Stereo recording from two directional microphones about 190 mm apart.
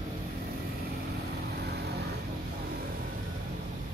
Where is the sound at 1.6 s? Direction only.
60° right (ahead or behind).